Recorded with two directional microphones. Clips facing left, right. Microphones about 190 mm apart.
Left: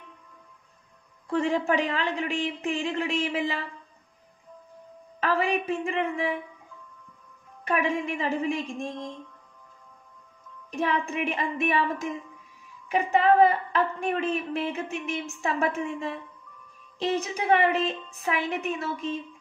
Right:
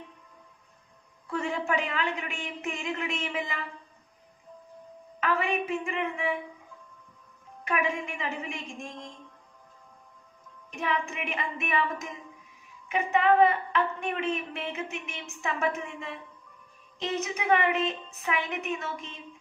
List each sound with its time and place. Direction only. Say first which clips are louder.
1.3 s a woman's voice: left 5 dB; 35° left (ahead or behind)
5.2 s a woman's voice: left 3 dB; 35° left (ahead or behind)
7.6 s a woman's voice: left 3 dB; 35° left (ahead or behind)
10.7 s a woman's voice: left 4 dB; 35° left (ahead or behind)